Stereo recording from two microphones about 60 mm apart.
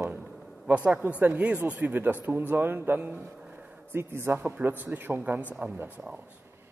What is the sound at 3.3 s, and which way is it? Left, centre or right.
A man's voice, right.